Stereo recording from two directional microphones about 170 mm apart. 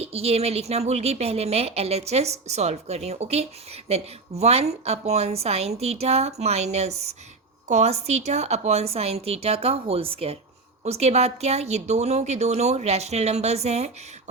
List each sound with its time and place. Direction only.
0.0 s a woman's voice: 35° right (ahead or behind)